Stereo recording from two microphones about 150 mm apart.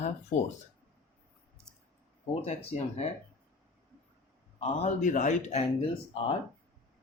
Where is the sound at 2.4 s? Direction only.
45° left (ahead or behind).